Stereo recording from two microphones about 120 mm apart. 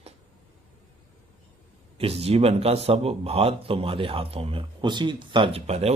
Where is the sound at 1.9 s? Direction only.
55° right (ahead or behind).